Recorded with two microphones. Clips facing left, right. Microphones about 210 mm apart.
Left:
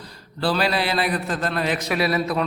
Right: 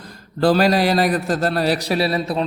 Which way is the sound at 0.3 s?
45° right (ahead or behind).